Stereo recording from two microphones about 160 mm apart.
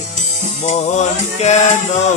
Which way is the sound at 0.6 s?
45° left (ahead or behind).